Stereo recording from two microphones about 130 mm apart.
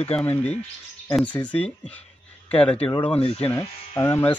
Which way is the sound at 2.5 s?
10° left (ahead or behind).